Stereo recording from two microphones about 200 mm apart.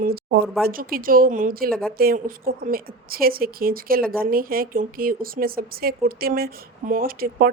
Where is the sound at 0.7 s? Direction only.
45° right (ahead or behind).